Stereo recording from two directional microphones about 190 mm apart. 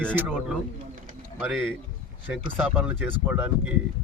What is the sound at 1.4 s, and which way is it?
Speech, 5° right (ahead or behind).